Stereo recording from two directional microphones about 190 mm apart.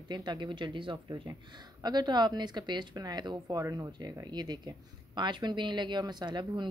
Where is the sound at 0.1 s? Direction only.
25° right (ahead or behind).